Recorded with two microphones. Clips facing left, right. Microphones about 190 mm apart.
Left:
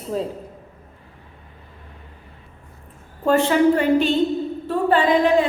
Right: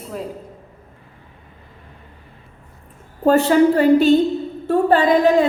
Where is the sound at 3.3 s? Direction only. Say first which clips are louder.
Right 3 dB; 40° right (ahead or behind).